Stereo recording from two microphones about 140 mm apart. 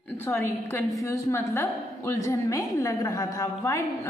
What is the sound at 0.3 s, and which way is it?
A woman's voice, 20° left (ahead or behind).